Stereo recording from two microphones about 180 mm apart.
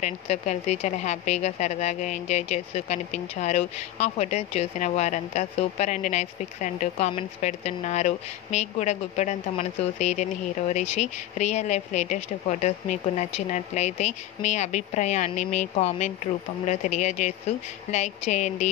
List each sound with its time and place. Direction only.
0.0 s speech: 40° left (ahead or behind)